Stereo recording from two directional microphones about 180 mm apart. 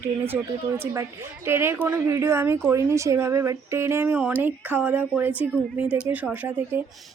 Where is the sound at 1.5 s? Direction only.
15° right (ahead or behind).